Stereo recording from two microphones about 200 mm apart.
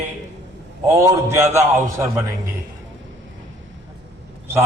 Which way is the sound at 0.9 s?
15° right (ahead or behind).